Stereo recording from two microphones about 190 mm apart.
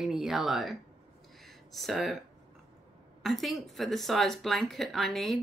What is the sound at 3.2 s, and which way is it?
Speech, centre (ahead or behind).